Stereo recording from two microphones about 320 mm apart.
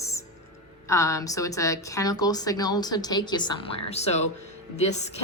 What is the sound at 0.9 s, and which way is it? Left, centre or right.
A woman's voice, centre.